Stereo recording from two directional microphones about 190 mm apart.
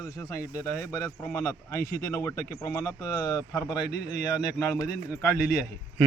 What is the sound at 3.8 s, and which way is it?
Speech, 60° left (ahead or behind).